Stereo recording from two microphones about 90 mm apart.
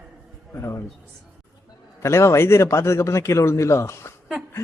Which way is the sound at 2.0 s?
30° left (ahead or behind).